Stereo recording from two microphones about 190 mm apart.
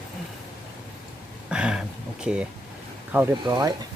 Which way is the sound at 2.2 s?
5° right (ahead or behind).